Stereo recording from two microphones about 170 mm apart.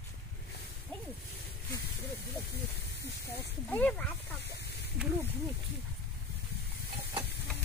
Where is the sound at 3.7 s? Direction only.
10° left (ahead or behind).